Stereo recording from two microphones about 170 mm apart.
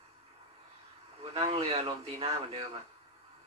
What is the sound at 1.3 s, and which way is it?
A man's voice, 35° right (ahead or behind).